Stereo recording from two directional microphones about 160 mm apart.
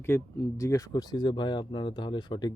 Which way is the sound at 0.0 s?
15° left (ahead or behind).